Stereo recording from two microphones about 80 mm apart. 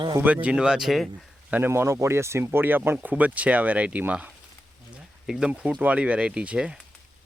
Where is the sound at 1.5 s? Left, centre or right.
Centre.